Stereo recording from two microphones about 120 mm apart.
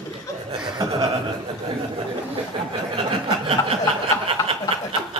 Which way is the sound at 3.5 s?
55° right (ahead or behind).